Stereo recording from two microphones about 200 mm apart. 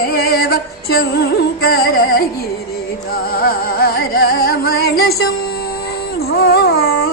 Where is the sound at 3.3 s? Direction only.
45° left (ahead or behind).